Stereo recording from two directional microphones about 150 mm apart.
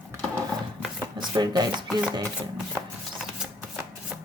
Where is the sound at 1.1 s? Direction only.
30° right (ahead or behind).